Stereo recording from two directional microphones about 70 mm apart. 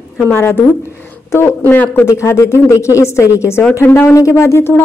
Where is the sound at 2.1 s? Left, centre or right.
Left.